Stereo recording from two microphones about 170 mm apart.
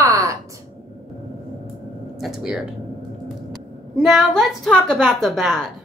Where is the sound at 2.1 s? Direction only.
Centre (ahead or behind).